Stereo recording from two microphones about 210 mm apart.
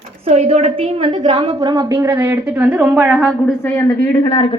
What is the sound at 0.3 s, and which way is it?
A woman's voice, 30° right (ahead or behind).